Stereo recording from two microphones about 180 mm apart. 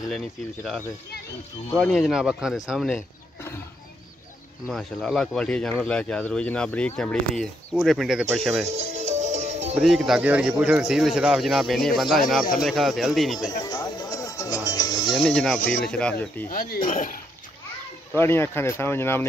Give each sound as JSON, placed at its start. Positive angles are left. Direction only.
{"t": 0.1, "sound": "speech", "side_deg": 0}
{"t": 4.6, "sound": "speech", "side_deg": 0}
{"t": 8.6, "sound": "music", "side_deg": -40}
{"t": 9.8, "sound": "speech", "side_deg": 0}
{"t": 13.4, "sound": "music", "side_deg": 20}
{"t": 15.1, "sound": "speech", "side_deg": 0}
{"t": 16.4, "sound": "speech", "side_deg": 50}
{"t": 18.1, "sound": "speech", "side_deg": 15}